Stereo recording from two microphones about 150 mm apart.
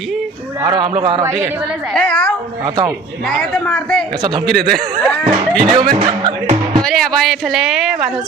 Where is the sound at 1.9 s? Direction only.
5° left (ahead or behind).